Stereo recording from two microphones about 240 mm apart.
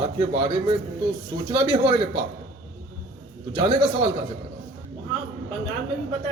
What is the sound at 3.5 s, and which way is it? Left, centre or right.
Speech, centre.